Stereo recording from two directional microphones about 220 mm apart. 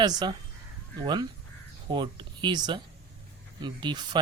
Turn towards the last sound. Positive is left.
turn(degrees=-20)  # may be behind; listen again after turning